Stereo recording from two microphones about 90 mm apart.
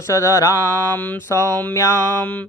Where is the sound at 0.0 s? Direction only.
35° left (ahead or behind).